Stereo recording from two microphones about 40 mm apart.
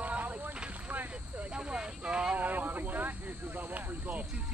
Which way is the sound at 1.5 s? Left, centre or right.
Right.